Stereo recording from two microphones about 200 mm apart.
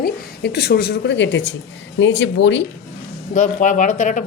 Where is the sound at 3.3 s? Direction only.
40° left (ahead or behind).